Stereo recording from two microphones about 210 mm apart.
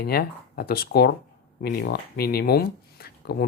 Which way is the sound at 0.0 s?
45° left (ahead or behind).